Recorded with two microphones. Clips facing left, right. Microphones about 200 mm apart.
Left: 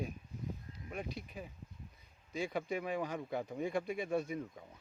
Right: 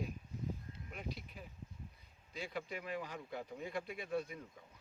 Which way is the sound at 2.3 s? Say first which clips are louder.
Left 7 dB; 50° left (ahead or behind).